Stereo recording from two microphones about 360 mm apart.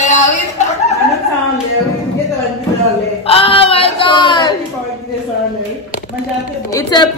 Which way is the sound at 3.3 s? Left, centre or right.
Centre.